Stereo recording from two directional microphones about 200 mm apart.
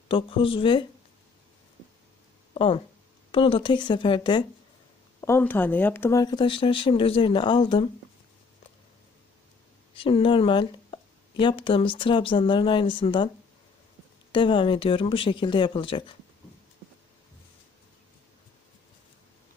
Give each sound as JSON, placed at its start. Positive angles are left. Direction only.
{"t": 0.1, "sound": "speech", "side_deg": 25}
{"t": 2.5, "sound": "speech", "side_deg": 25}
{"t": 5.2, "sound": "speech", "side_deg": 10}
{"t": 9.9, "sound": "speech", "side_deg": 25}
{"t": 14.3, "sound": "speech", "side_deg": 25}